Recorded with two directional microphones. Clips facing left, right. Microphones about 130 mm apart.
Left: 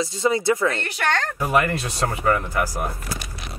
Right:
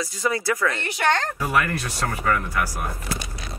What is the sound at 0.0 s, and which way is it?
Speech, 25° left (ahead or behind).